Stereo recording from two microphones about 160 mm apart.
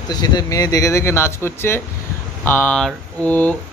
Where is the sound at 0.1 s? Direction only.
25° left (ahead or behind).